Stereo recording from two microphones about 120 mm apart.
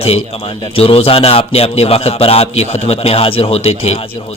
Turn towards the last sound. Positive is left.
turn(degrees=60)  # may be behind; listen again after turning